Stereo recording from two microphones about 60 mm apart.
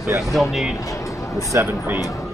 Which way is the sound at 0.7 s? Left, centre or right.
Left.